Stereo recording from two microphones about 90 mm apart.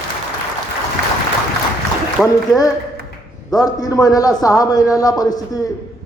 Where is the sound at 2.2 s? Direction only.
5° left (ahead or behind).